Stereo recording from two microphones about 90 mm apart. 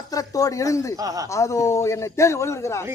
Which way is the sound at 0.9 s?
40° right (ahead or behind).